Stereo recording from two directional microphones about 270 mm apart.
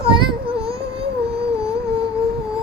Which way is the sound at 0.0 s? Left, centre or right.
Centre.